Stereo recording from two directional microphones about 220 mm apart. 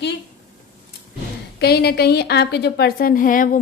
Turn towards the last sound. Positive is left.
turn(degrees=40)  # may be behind; listen again after turning